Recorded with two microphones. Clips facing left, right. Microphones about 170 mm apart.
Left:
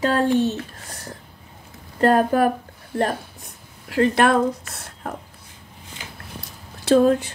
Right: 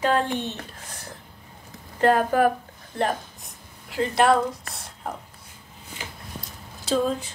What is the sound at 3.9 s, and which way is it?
Speech, 60° left (ahead or behind).